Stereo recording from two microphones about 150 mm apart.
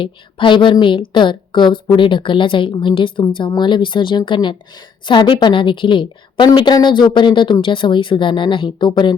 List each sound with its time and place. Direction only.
0.0 s a woman's voice: 35° left (ahead or behind)